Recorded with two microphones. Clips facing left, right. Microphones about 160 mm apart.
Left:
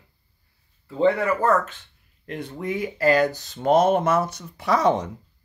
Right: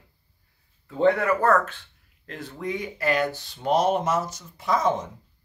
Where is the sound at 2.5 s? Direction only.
30° left (ahead or behind); by 5.1 s 70° left (ahead or behind).